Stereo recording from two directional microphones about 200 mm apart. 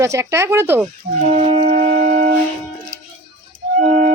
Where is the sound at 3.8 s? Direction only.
35° right (ahead or behind).